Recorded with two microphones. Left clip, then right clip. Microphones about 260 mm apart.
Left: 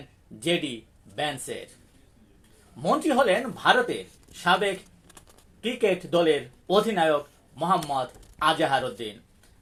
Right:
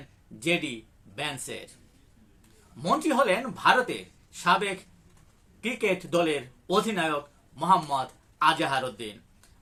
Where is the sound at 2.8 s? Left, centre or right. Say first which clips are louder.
Left 2 dB; centre.